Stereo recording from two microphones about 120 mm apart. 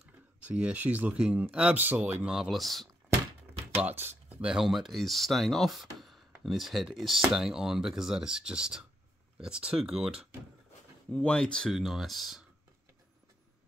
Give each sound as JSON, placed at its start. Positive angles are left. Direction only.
{"t": 0.0, "sound": "speech", "side_deg": -10}
{"t": 2.2, "sound": "speech", "side_deg": -5}
{"t": 3.8, "sound": "speech", "side_deg": -20}
{"t": 11.1, "sound": "speech", "side_deg": 10}